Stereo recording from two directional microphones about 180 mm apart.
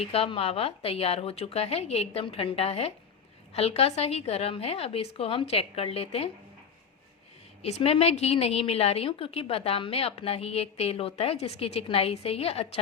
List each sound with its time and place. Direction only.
0.0 s a woman's voice: 35° left (ahead or behind)
7.6 s a woman's voice: 35° left (ahead or behind)